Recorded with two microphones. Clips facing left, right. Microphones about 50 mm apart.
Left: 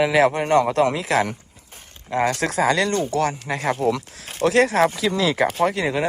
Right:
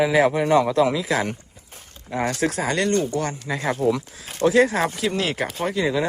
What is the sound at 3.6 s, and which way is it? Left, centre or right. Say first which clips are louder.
Speech: left 1 dB; left.